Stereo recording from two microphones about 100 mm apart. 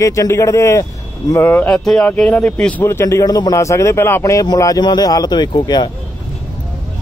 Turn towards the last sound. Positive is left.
turn(degrees=45)  # may be behind; listen again after turning